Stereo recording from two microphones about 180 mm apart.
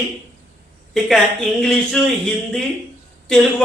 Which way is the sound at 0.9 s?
Centre (ahead or behind).